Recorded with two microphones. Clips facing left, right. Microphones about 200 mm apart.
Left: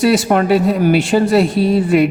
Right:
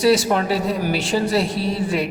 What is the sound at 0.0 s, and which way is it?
A woman's voice, 55° left (ahead or behind).